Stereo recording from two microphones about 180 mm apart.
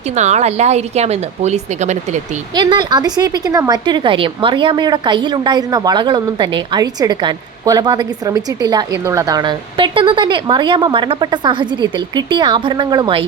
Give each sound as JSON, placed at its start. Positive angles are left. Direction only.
{"t": 0.1, "sound": "speech", "side_deg": -40}
{"t": 2.6, "sound": "speech", "side_deg": -25}